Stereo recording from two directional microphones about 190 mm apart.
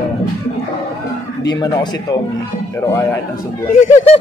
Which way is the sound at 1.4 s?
20° left (ahead or behind).